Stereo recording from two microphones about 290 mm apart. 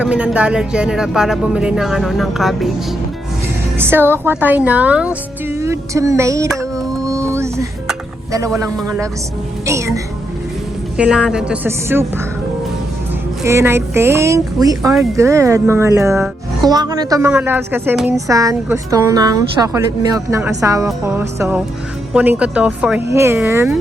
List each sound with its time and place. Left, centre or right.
0.0 s speech: centre
3.8 s speech: centre
6.6 s music: centre
8.5 s speech: centre
13.4 s speech: centre